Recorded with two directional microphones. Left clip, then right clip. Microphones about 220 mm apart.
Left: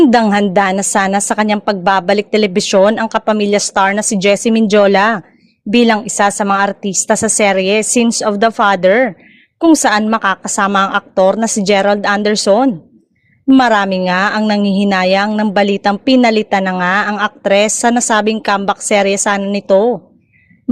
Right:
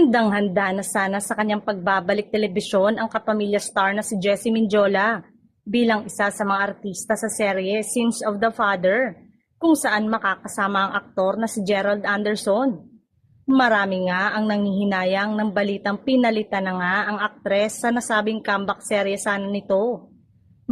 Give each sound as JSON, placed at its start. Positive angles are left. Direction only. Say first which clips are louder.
{"t": 0.0, "sound": "a woman's voice", "louder": "left 8 dB", "side_deg": 40}